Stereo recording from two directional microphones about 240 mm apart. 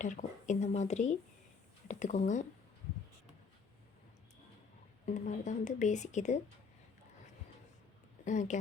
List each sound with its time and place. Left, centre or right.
0.0 s speech: left
5.0 s speech: left
8.2 s speech: left